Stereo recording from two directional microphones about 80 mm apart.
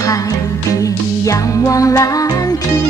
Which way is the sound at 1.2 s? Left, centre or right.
Left.